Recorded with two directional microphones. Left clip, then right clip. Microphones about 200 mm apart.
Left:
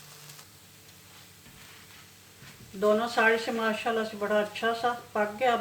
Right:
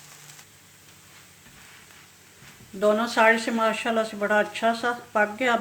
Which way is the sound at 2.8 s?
50° right (ahead or behind).